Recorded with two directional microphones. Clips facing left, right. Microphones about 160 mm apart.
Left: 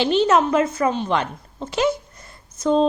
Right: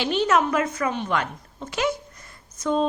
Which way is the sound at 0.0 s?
30° left (ahead or behind).